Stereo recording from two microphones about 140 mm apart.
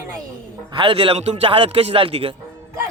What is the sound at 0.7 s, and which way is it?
A man's voice, 35° right (ahead or behind).